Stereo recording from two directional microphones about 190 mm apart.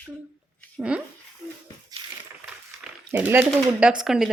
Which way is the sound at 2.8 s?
10° right (ahead or behind).